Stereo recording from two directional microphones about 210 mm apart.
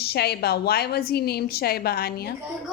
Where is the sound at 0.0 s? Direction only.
50° left (ahead or behind).